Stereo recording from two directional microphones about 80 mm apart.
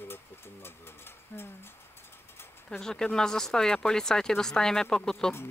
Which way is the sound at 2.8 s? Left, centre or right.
Centre.